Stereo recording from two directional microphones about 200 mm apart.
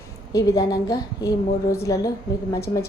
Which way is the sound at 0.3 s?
15° left (ahead or behind).